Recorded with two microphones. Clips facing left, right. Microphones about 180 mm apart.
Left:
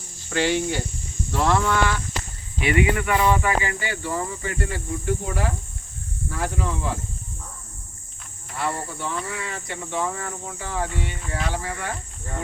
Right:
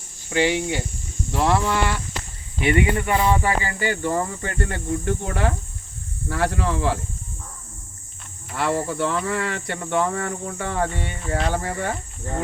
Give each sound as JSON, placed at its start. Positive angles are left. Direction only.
{"t": 0.3, "sound": "speech", "side_deg": -15}
{"t": 2.9, "sound": "speech", "side_deg": -30}
{"t": 6.2, "sound": "speech", "side_deg": -80}
{"t": 8.5, "sound": "speech", "side_deg": -80}